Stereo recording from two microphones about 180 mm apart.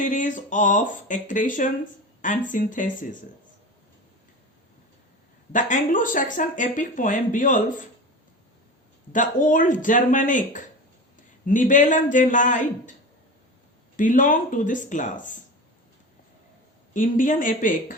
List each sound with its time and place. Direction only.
0.0 s speech: 45° left (ahead or behind)
5.5 s speech: 45° left (ahead or behind)
9.1 s speech: 45° left (ahead or behind)
13.9 s speech: 45° left (ahead or behind)
16.9 s speech: 45° left (ahead or behind)